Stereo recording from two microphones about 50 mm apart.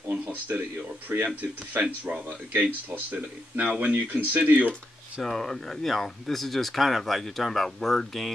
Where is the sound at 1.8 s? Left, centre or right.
Right.